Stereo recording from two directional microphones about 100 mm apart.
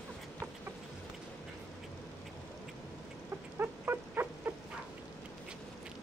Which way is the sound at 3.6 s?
20° right (ahead or behind).